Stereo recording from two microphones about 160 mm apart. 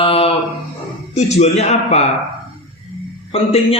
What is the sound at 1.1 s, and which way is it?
Speech, 45° left (ahead or behind).